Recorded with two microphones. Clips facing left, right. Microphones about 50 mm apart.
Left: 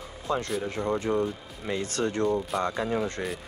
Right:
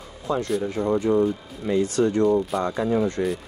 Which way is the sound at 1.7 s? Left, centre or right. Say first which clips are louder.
Right 8 dB; left.